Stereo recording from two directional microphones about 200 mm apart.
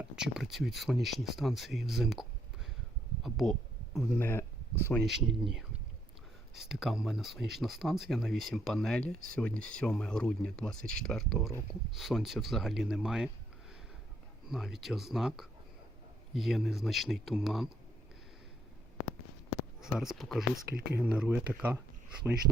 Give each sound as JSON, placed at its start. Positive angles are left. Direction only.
{"t": 0.0, "sound": "speech", "side_deg": -5}
{"t": 3.2, "sound": "a sound", "side_deg": 0}
{"t": 3.9, "sound": "speech", "side_deg": 5}
{"t": 5.0, "sound": "speech", "side_deg": 0}
{"t": 14.4, "sound": "speech", "side_deg": 0}
{"t": 19.8, "sound": "speech", "side_deg": 0}